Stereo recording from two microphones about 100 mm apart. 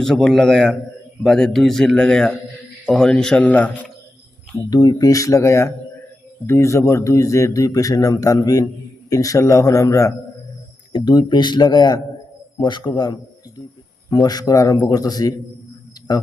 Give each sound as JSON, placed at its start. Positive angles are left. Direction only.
{"t": 0.0, "sound": "a man's voice", "side_deg": 5}
{"t": 4.7, "sound": "speech", "side_deg": 40}
{"t": 10.9, "sound": "speech", "side_deg": 50}